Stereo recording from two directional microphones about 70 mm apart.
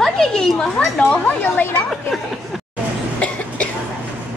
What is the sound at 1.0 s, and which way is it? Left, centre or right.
Speech, left.